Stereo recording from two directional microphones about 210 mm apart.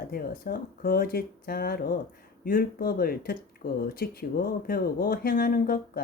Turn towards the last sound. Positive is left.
turn(degrees=45)  # may be behind; listen again after turning